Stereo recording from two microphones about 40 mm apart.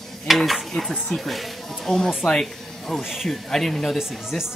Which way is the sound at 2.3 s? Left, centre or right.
Centre.